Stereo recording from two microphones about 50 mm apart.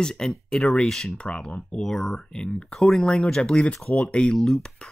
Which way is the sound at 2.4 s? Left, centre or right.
Left.